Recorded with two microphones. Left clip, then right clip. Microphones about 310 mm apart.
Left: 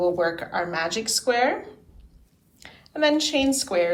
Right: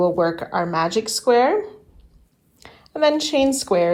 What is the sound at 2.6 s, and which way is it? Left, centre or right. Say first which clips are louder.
A woman's voice: right 4 dB; centre.